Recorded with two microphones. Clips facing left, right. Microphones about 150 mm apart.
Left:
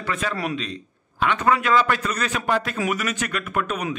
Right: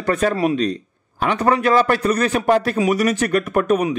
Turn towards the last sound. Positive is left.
turn(degrees=-40)  # may be behind; listen again after turning